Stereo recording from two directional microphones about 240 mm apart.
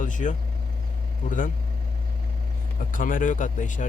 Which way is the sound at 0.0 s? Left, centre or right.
Left.